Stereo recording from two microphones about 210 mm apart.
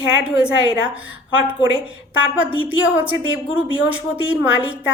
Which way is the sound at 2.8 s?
5° right (ahead or behind).